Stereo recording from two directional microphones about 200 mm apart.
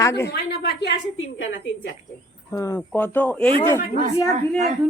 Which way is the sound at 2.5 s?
15° left (ahead or behind).